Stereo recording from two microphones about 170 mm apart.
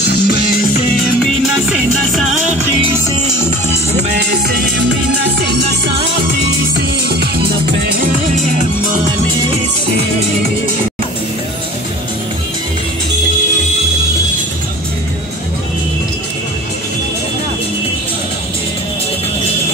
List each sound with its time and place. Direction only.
0.0 s music: 65° left (ahead or behind)
1.2 s music: centre (ahead or behind)
3.4 s music: 45° right (ahead or behind)
4.2 s music: 70° right (ahead or behind)